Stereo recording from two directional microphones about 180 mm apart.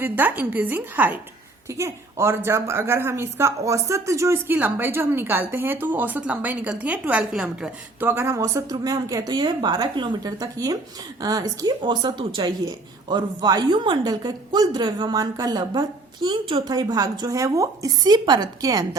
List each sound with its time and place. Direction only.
0.0 s a woman's voice: 10° right (ahead or behind)